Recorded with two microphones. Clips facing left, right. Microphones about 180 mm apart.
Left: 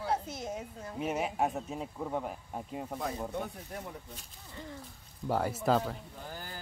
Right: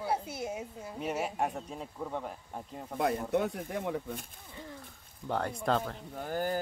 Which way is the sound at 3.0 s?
75° right (ahead or behind).